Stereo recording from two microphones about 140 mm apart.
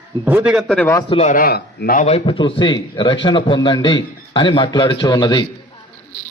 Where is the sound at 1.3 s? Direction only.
90° left.